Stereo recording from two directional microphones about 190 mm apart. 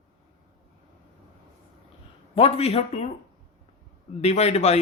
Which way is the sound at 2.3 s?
30° left (ahead or behind).